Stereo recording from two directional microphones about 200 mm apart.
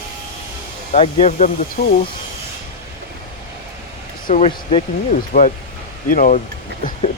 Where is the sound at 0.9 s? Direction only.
30° left (ahead or behind).